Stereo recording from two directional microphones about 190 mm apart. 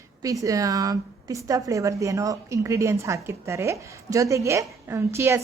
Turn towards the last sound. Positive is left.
turn(degrees=-15)  # may be behind; listen again after turning